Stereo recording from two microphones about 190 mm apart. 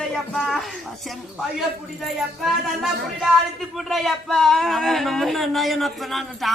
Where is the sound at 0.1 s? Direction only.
Centre (ahead or behind).